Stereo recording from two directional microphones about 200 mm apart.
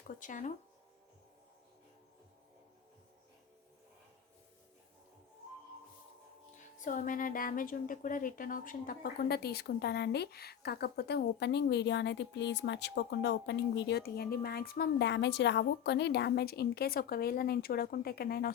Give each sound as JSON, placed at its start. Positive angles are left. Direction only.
{"t": 0.2, "sound": "speech", "side_deg": 40}
{"t": 6.7, "sound": "a woman's voice", "side_deg": 40}